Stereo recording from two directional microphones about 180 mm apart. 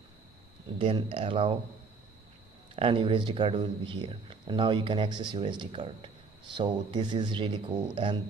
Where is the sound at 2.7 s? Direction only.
30° right (ahead or behind).